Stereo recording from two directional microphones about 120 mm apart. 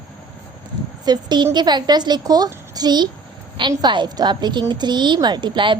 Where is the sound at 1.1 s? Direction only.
35° right (ahead or behind).